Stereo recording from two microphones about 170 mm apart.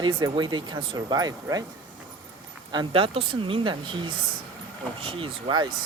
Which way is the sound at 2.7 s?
30° right (ahead or behind).